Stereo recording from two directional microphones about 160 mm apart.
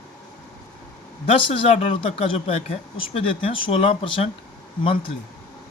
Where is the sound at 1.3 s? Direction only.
35° left (ahead or behind).